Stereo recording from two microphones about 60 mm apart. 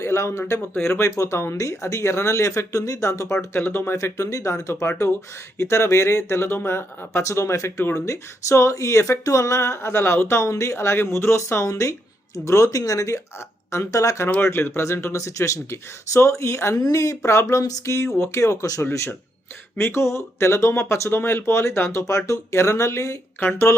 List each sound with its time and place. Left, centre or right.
0.0 s speech: left
3.5 s speech: left
3.9 s speech: left
7.3 s speech: left
11.6 s speech: left
14.4 s speech: left
16.7 s speech: left
19.7 s speech: left
21.9 s speech: left
23.4 s speech: left